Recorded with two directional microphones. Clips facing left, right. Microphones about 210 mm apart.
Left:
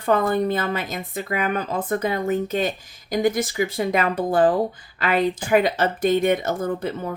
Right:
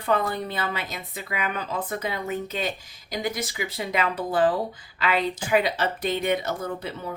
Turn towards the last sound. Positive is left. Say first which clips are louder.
# left 6 dB
turn(degrees=50)  # may be behind; listen again after turning